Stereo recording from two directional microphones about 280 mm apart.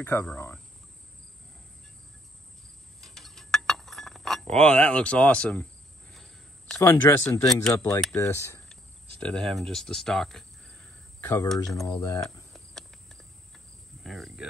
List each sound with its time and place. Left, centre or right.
0.0 s speech: centre
3.0 s cutlery: centre
6.1 s speech: centre
12.0 s speech: centre
12.5 s cricket: centre